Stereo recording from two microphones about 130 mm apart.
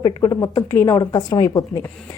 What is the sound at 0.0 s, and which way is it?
Speech, 25° left (ahead or behind).